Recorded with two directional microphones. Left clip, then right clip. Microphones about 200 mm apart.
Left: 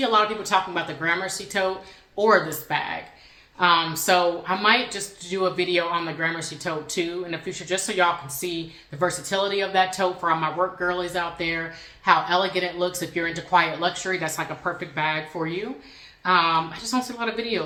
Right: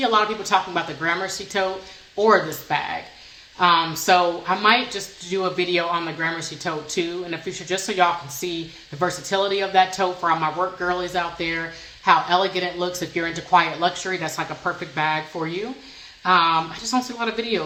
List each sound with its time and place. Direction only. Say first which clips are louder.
0.0 s speech: right 1 dB; 20° right (ahead or behind)